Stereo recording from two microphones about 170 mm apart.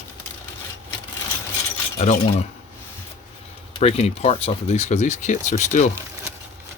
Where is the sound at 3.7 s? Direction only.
40° left (ahead or behind).